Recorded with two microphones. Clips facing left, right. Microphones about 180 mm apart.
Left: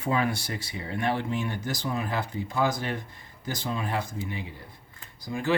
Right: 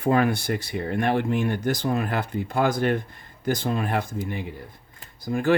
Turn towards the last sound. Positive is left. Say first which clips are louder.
# right 6 dB
turn(degrees=-50)  # may be behind; listen again after turning